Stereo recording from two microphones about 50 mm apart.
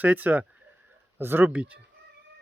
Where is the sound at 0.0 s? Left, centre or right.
Right.